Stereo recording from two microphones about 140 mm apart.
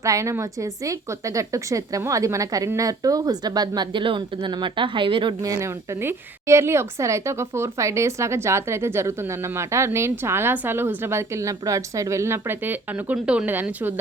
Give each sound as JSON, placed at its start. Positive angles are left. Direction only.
{"t": 0.0, "sound": "a woman's voice", "side_deg": -20}
{"t": 5.4, "sound": "a woman's voice", "side_deg": -20}